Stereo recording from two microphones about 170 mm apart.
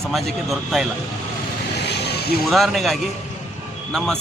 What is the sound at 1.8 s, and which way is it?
Vehicle, 75° left (ahead or behind).